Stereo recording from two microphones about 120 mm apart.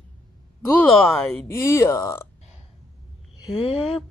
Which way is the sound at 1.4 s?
20° left (ahead or behind).